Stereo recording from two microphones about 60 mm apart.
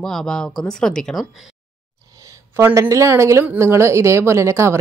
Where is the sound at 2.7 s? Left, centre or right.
Right.